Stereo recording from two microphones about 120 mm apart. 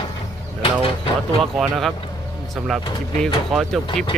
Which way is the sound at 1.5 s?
5° right (ahead or behind).